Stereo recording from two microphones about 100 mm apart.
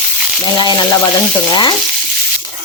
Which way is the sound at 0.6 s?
45° left (ahead or behind).